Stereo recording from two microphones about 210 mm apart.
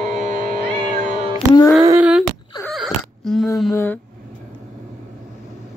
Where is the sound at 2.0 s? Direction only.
5° right (ahead or behind).